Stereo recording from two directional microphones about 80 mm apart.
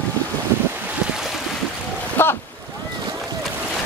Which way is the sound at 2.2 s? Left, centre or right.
Left.